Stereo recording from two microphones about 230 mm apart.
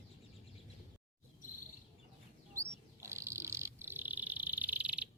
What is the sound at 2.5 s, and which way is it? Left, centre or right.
Bird, centre.